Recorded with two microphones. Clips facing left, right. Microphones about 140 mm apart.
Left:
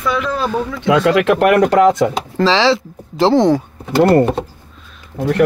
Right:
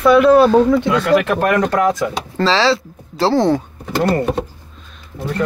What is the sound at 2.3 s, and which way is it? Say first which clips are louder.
Speech: left 1 dB; 15° left (ahead or behind).